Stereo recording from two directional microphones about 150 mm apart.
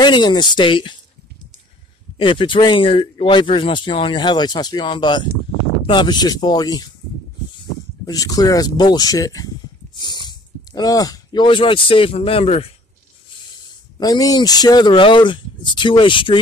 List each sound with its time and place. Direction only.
0.0 s speech: 30° left (ahead or behind)
2.1 s speech: 35° left (ahead or behind)
8.1 s speech: 25° left (ahead or behind); by 12.7 s 40° left (ahead or behind)
13.5 s speech: 30° left (ahead or behind)